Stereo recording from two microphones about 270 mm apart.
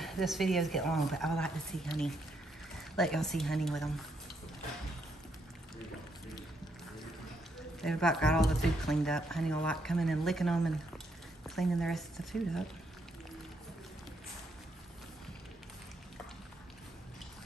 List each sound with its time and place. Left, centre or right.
0.0 s speech: centre
7.8 s speech: centre